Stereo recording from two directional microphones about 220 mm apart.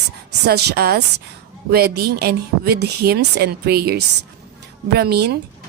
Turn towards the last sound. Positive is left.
turn(degrees=-45)  # may be behind; listen again after turning